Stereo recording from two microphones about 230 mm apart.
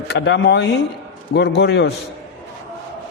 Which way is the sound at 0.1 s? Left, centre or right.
Left.